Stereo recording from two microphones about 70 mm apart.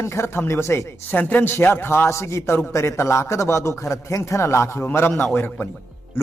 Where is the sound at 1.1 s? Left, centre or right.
Left.